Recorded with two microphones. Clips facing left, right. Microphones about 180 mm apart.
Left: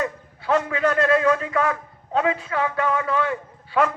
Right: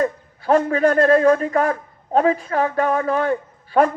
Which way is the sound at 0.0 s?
45° right (ahead or behind).